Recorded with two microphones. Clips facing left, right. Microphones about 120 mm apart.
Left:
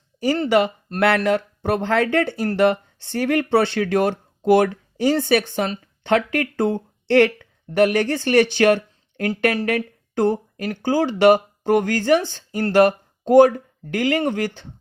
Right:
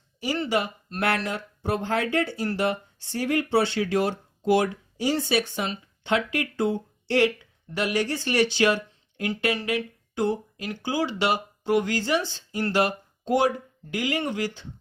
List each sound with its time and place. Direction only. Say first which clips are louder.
0.2 s speech: left 7 dB; 45° left (ahead or behind)
0.4 s speech: left 8 dB; 65° left (ahead or behind)